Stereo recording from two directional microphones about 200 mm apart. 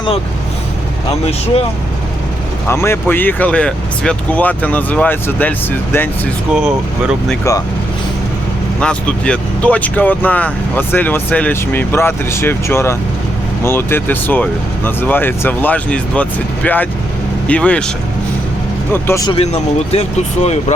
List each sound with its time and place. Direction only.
2.6 s speech: 15° left (ahead or behind)
6.5 s speech: 5° right (ahead or behind)
8.8 s speech: 5° left (ahead or behind)
19.0 s speech: 15° left (ahead or behind)
19.9 s speech: 30° left (ahead or behind)